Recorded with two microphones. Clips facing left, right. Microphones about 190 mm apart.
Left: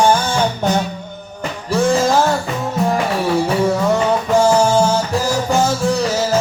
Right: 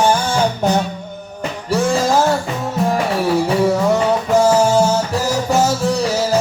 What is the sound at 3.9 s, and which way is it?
Music, 5° right (ahead or behind).